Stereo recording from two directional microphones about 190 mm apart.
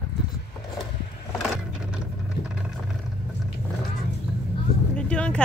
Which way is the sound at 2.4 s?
55° left (ahead or behind).